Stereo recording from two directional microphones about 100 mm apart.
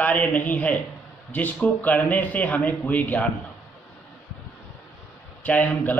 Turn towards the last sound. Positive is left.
turn(degrees=15)  # may be behind; listen again after turning